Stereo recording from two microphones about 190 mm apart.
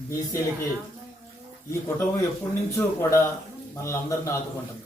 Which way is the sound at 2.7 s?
15° left (ahead or behind).